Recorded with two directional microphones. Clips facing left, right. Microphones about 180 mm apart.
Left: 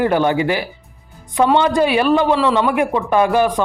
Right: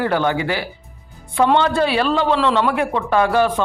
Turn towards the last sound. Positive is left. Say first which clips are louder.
# left 2 dB
turn(degrees=15)  # may be behind; listen again after turning